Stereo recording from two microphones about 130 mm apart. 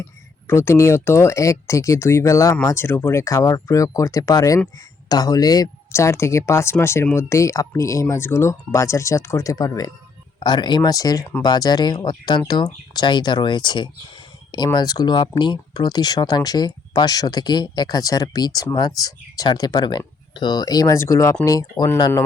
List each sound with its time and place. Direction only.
0.0 s speech: 20° left (ahead or behind)